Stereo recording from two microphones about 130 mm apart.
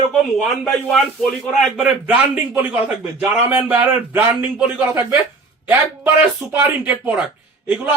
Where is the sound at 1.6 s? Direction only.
10° right (ahead or behind).